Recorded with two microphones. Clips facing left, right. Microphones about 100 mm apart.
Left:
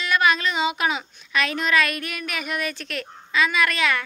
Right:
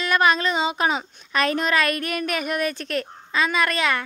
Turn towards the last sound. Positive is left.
turn(degrees=-30)  # may be behind; listen again after turning